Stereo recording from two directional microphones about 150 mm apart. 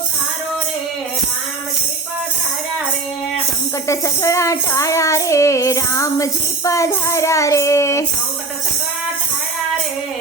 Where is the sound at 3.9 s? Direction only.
20° left (ahead or behind).